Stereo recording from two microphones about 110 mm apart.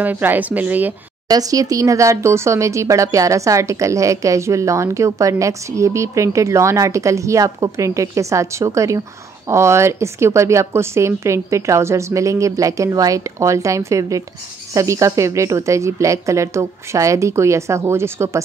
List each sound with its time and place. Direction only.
0.0 s speech: 15° right (ahead or behind)
1.3 s speech: 35° right (ahead or behind)